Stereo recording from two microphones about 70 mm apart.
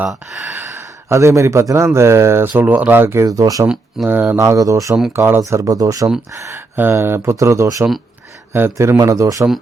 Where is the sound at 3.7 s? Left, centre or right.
Centre.